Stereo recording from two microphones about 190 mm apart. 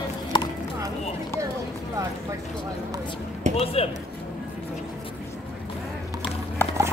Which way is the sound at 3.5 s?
30° left (ahead or behind).